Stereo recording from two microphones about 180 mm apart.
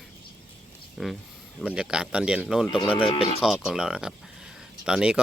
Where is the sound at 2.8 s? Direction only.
30° left (ahead or behind).